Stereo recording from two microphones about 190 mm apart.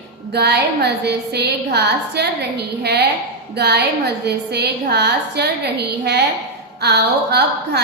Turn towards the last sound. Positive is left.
turn(degrees=-60)  # may be behind; listen again after turning